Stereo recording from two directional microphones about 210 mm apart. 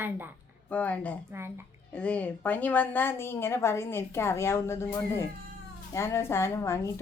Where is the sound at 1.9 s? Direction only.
5° left (ahead or behind).